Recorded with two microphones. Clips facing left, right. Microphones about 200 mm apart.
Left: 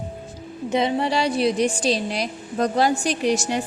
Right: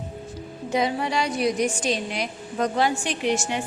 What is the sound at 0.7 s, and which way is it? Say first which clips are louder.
A woman's voice: left 3 dB; 25° left (ahead or behind).